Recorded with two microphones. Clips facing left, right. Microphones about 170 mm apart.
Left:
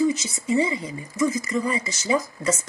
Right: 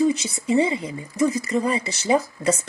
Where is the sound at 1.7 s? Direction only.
30° right (ahead or behind).